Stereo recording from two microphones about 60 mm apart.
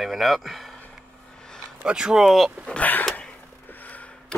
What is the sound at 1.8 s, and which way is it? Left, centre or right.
Speech, centre.